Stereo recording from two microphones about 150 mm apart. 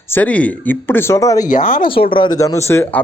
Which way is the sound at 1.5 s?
60° left (ahead or behind).